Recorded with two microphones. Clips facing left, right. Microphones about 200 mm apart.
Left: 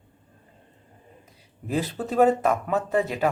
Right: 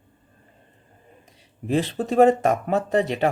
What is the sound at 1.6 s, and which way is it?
Speech, 25° right (ahead or behind).